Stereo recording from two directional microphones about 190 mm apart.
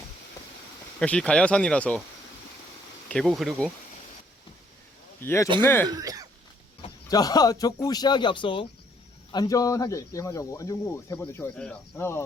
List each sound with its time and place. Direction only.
0.9 s speech: 5° left (ahead or behind)
3.1 s speech: centre (ahead or behind)
5.2 s speech: 15° left (ahead or behind)
5.9 s speech: 20° right (ahead or behind)
7.1 s speech: 20° left (ahead or behind)